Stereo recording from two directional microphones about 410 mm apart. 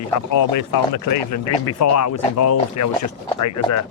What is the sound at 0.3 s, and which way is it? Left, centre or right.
Speech, left.